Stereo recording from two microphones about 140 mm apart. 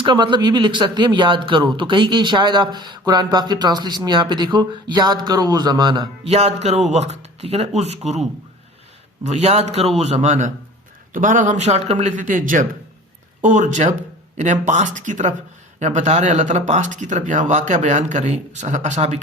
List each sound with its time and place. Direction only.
0.0 s speech: 35° right (ahead or behind)
6.2 s speech: 50° right (ahead or behind)
9.2 s speech: 50° right (ahead or behind)
11.1 s speech: 65° right (ahead or behind); by 19.2 s 50° right (ahead or behind)